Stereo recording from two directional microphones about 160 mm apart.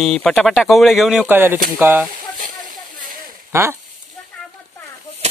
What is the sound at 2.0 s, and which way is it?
Snake, 55° right (ahead or behind).